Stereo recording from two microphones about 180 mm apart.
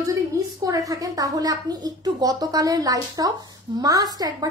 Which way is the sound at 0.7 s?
20° right (ahead or behind).